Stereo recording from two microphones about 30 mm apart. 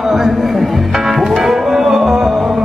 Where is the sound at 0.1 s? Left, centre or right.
Centre.